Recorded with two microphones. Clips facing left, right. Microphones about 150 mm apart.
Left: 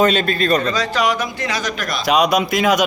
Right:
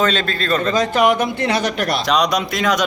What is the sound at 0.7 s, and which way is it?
A man's voice, 55° right (ahead or behind).